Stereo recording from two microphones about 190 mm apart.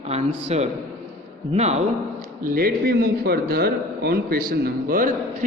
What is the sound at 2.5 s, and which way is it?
Speech, 55° right (ahead or behind).